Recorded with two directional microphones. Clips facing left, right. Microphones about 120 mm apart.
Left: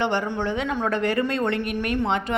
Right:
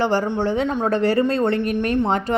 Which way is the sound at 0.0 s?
35° right (ahead or behind).